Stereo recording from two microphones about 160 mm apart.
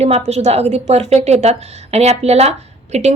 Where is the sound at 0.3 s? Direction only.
40° right (ahead or behind).